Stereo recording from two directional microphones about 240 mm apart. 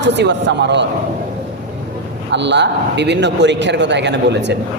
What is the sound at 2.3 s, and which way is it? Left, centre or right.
A man's voice, right.